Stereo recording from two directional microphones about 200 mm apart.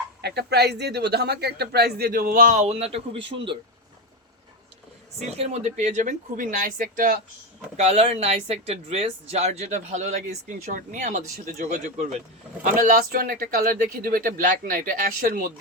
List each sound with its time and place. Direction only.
0.2 s speech: 55° right (ahead or behind); by 3.6 s 25° right (ahead or behind)
5.4 s speech: 35° right (ahead or behind)
7.8 s speech: 30° right (ahead or behind)